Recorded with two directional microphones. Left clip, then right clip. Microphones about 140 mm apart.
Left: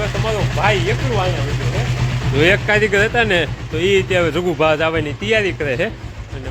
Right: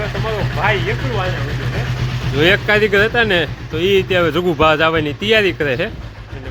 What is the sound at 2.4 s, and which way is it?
Speech, 10° right (ahead or behind).